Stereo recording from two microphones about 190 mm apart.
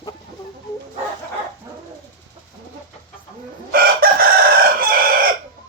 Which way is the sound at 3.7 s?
50° right (ahead or behind).